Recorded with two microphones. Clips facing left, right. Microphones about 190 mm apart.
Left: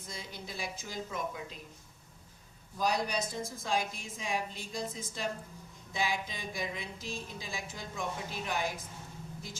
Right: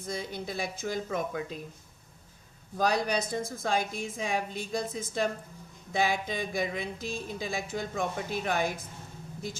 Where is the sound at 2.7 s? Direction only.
65° right (ahead or behind).